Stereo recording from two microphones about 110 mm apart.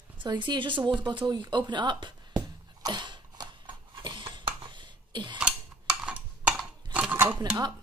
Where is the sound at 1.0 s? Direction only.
45° right (ahead or behind).